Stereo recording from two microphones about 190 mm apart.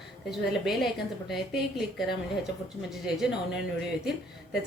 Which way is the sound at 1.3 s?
Centre (ahead or behind).